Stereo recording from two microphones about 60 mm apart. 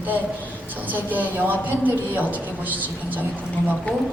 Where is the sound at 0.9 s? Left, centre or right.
Right.